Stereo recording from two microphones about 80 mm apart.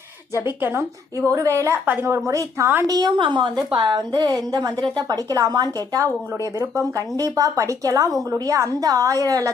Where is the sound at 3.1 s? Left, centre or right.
Right.